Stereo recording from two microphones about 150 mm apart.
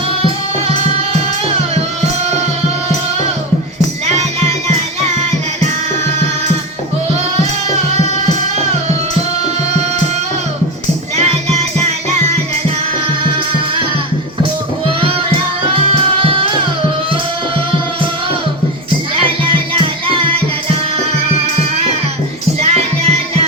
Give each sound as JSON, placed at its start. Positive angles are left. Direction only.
{"t": 4.0, "sound": "music", "side_deg": -50}
{"t": 15.7, "sound": "music", "side_deg": -35}
{"t": 19.8, "sound": "music", "side_deg": -35}
{"t": 22.6, "sound": "music", "side_deg": -45}